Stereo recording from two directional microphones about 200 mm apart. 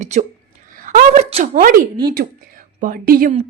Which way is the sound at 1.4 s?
45° right (ahead or behind).